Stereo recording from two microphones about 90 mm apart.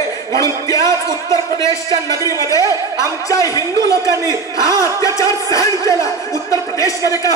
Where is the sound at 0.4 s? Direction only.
35° left (ahead or behind).